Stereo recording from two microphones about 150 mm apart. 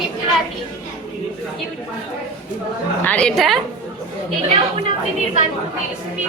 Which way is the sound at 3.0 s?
10° left (ahead or behind).